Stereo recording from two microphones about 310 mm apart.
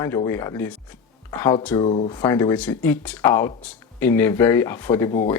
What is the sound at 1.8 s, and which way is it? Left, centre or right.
Speech, left.